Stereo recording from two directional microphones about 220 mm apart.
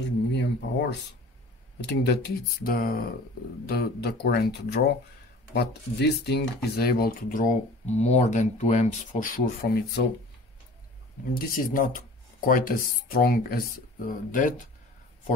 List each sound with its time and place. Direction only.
0.0 s a sound: 50° left (ahead or behind)
1.8 s speech: 50° left (ahead or behind)
11.3 s speech: 40° left (ahead or behind)